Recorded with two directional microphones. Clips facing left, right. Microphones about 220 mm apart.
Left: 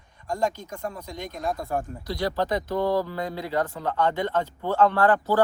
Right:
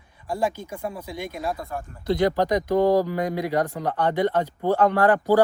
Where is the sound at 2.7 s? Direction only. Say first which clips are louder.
Right 6 dB; 45° right (ahead or behind).